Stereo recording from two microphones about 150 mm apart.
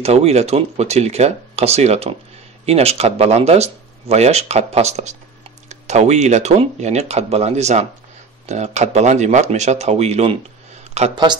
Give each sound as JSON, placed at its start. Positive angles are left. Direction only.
{"t": 0.0, "sound": "speech", "side_deg": -45}